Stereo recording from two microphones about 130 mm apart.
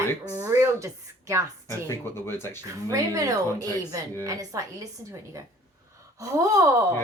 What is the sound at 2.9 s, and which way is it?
A woman's voice, 25° right (ahead or behind).